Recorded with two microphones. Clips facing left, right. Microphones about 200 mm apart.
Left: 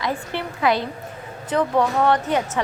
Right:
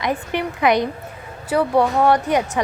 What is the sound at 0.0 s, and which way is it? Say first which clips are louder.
A woman's voice: right 4 dB; 15° right (ahead or behind).